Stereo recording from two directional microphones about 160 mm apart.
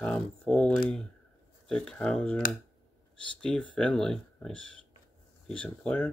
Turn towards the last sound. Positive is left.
turn(degrees=10)  # may be behind; listen again after turning